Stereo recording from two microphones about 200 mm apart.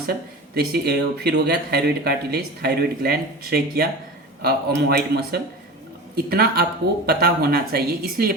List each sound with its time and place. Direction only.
0.1 s speech: 50° right (ahead or behind)